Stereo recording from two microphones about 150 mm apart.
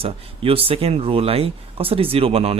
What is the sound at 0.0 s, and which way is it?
Speech, 40° right (ahead or behind).